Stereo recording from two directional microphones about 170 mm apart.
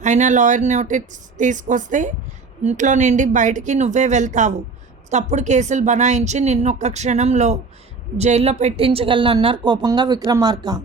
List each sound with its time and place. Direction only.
0.0 s a woman's voice: 45° right (ahead or behind); by 10.8 s 25° right (ahead or behind)